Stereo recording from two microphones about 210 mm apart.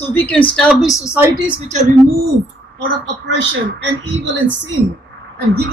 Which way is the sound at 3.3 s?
60° right (ahead or behind).